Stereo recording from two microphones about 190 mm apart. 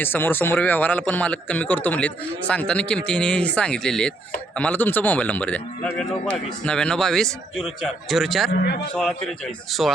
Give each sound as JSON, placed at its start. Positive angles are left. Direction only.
{"t": 0.0, "sound": "a man's voice", "side_deg": 10}
{"t": 8.6, "sound": "a man's voice", "side_deg": 55}
{"t": 9.0, "sound": "a man's voice", "side_deg": 5}